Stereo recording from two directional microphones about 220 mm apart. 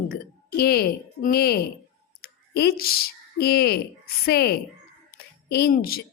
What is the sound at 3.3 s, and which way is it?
A woman's voice, 45° left (ahead or behind).